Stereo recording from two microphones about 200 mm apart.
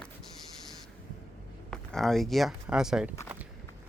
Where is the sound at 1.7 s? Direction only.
5° left (ahead or behind).